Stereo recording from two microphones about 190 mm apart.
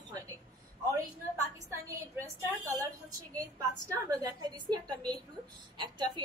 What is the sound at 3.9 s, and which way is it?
A woman's voice, 20° right (ahead or behind).